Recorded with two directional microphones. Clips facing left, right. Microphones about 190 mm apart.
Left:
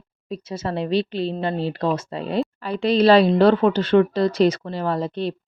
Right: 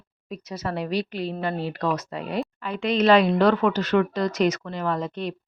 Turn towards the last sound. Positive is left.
turn(degrees=30)  # may be behind; listen again after turning